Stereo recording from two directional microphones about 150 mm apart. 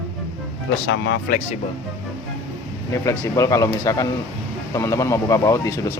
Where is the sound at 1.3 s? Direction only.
80° left.